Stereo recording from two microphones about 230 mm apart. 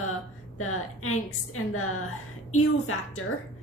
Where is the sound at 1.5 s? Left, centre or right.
Left.